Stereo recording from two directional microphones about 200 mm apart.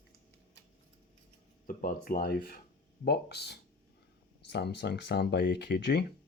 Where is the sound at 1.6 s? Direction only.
45° left (ahead or behind).